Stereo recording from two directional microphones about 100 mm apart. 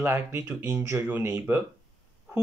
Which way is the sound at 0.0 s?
25° right (ahead or behind).